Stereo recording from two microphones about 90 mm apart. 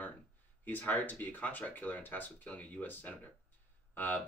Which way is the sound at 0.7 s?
20° left (ahead or behind).